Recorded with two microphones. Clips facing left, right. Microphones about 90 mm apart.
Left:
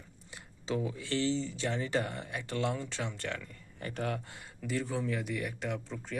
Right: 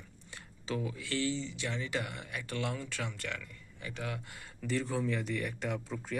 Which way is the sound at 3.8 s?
50° left (ahead or behind).